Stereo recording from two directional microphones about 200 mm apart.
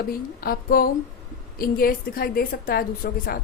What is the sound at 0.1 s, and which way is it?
A woman's voice, 45° left (ahead or behind).